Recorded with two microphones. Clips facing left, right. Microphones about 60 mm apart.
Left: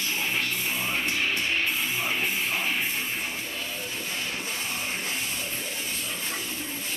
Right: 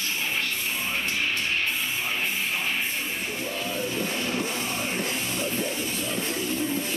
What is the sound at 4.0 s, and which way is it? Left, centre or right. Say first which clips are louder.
Music: right 5 dB; right.